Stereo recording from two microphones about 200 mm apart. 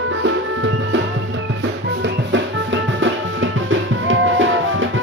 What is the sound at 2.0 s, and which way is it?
Music, 65° right (ahead or behind).